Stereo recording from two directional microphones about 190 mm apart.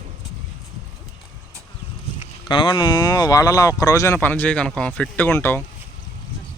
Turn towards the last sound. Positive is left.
turn(degrees=10)  # may be behind; listen again after turning